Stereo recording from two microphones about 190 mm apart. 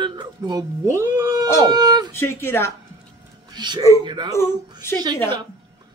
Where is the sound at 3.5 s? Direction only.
25° right (ahead or behind).